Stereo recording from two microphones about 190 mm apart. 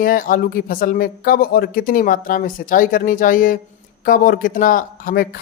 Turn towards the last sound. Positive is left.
turn(degrees=50)  # may be behind; listen again after turning